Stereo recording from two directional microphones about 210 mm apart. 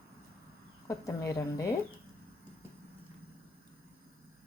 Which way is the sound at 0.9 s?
15° left (ahead or behind).